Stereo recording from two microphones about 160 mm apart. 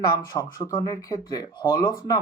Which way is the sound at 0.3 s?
25° left (ahead or behind).